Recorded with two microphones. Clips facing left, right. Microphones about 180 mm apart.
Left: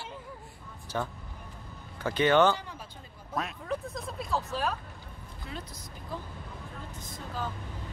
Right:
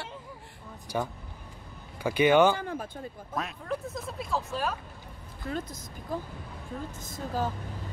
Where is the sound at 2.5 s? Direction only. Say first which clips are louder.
Right 7 dB; 50° right (ahead or behind).